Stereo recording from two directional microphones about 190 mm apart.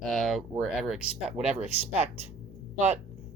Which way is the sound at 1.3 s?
35° right (ahead or behind).